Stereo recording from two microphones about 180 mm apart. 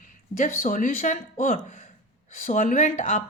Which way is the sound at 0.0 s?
45° left (ahead or behind).